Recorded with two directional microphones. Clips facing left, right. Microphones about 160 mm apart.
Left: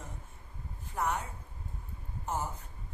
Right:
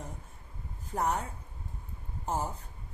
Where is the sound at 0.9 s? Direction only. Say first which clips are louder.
Right 2 dB; 35° right (ahead or behind).